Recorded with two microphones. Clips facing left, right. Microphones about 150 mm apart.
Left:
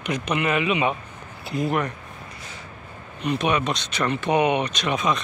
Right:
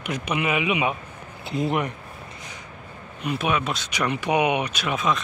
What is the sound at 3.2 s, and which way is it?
A man's voice, 5° right (ahead or behind).